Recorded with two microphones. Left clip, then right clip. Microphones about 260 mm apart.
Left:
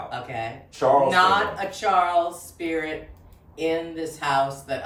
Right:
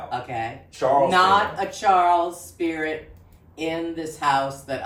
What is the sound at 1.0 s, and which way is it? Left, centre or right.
Speech, centre.